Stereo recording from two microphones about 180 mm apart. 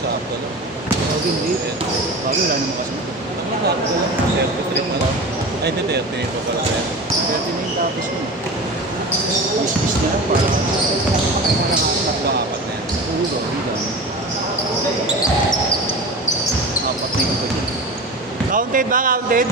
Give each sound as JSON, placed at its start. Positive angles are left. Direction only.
{"t": 18.5, "sound": "speech", "side_deg": -50}